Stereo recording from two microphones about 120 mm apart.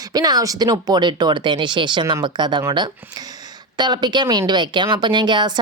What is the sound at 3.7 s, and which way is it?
Speech, 35° right (ahead or behind).